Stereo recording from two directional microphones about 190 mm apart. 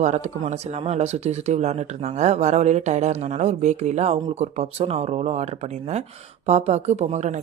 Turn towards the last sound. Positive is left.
turn(degrees=-35)  # may be behind; listen again after turning